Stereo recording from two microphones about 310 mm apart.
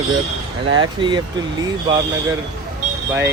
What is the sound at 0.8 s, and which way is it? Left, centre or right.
Speech, centre.